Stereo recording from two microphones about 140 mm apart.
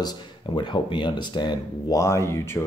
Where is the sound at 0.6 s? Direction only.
35° left (ahead or behind).